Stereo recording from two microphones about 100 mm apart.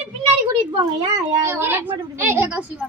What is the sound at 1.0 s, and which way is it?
Speech, 35° right (ahead or behind).